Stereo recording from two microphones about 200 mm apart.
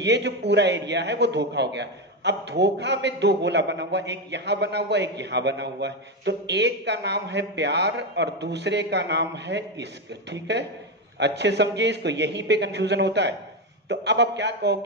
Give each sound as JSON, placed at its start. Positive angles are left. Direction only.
{"t": 0.0, "sound": "a man's voice", "side_deg": -60}